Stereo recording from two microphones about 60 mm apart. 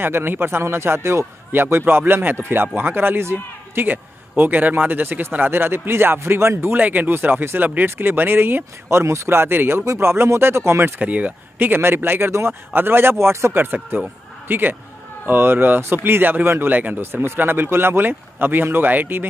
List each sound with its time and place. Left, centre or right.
0.0 s speech: right
3.8 s speech: right
6.8 s speech: right
8.9 s speech: right
11.0 s speech: right